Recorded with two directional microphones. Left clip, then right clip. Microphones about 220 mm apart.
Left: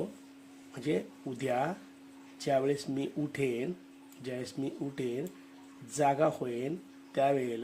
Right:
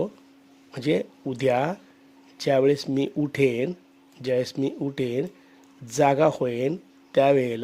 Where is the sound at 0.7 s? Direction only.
50° right (ahead or behind).